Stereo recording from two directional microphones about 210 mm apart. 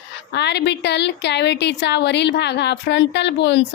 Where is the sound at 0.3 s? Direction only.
55° left (ahead or behind).